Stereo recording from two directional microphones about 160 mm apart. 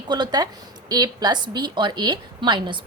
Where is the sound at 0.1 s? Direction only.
25° right (ahead or behind).